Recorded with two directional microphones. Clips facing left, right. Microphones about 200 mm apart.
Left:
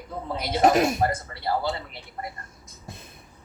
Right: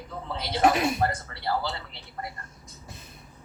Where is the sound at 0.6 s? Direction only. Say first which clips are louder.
Left 3 dB; 45° left (ahead or behind).